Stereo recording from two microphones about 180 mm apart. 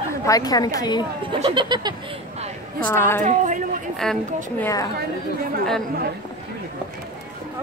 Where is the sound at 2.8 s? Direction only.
10° left (ahead or behind).